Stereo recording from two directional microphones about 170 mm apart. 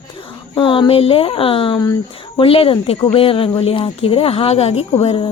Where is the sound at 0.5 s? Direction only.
30° left (ahead or behind).